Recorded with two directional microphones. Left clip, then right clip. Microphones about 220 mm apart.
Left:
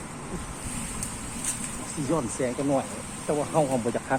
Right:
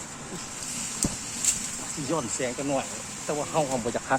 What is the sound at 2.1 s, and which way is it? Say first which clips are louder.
Speech: left 1 dB; 15° right (ahead or behind).